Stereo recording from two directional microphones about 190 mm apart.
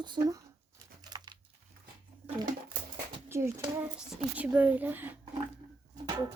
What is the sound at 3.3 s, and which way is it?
Speech, 15° right (ahead or behind).